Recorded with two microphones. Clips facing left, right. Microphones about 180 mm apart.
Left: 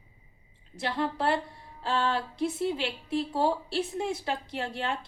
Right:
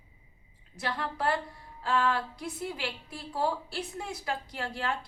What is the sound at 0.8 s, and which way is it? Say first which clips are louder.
A woman's voice: left 3 dB; 25° left (ahead or behind).